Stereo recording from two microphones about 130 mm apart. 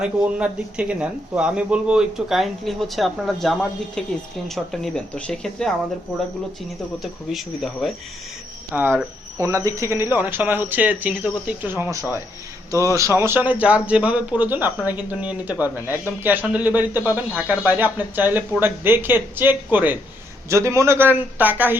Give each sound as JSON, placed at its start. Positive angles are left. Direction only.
{"t": 0.0, "sound": "speech", "side_deg": -10}
{"t": 7.0, "sound": "speech", "side_deg": 0}
{"t": 8.7, "sound": "a man's voice", "side_deg": -15}